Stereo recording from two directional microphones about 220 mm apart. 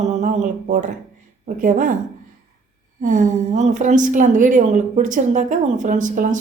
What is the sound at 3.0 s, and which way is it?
Speech, 35° right (ahead or behind).